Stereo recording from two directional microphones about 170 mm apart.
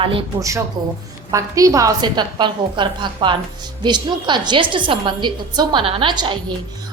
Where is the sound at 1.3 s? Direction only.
20° right (ahead or behind).